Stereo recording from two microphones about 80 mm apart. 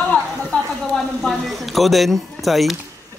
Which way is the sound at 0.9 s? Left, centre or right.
Centre.